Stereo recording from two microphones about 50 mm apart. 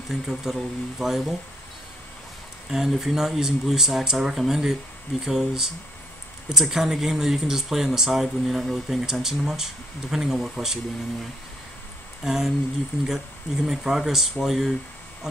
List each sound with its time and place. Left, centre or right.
0.1 s speech: centre
2.7 s speech: centre
12.3 s speech: centre